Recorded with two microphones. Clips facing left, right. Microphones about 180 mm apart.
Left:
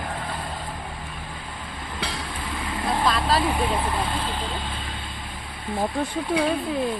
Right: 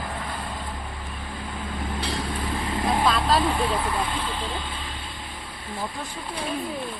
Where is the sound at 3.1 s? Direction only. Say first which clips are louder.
Even; 5° left (ahead or behind).